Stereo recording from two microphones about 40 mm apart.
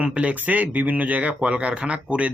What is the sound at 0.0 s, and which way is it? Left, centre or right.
Speech, right.